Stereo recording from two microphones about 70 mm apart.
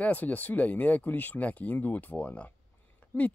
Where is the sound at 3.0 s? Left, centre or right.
Left.